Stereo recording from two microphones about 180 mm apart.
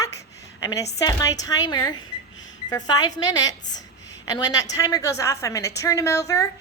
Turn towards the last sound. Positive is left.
turn(degrees=20)  # may be behind; listen again after turning